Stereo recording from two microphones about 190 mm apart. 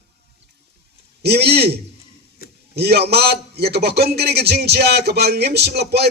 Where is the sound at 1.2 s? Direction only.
60° right (ahead or behind).